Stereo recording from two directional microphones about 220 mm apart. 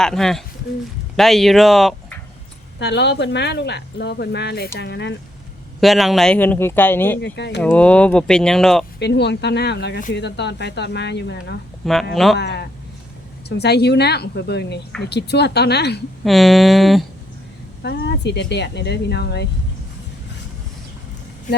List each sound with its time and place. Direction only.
0.0 s speech: centre (ahead or behind)
2.7 s speech: 50° left (ahead or behind)
5.8 s speech: centre (ahead or behind)
7.3 s speech: 50° left (ahead or behind)
7.6 s speech: 5° left (ahead or behind)
9.0 s speech: 50° left (ahead or behind)
12.1 s speech: centre (ahead or behind)
12.4 s speech: 50° left (ahead or behind)
16.2 s speech: centre (ahead or behind)
17.8 s speech: 50° left (ahead or behind)